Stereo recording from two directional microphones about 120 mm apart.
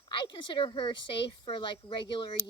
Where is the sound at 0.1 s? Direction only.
40° left (ahead or behind).